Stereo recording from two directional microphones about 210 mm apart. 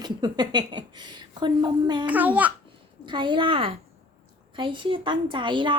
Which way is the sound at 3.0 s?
20° right (ahead or behind).